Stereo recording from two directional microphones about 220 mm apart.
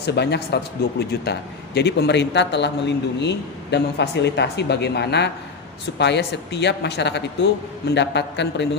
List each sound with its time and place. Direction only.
0.0 s speech: 50° left (ahead or behind)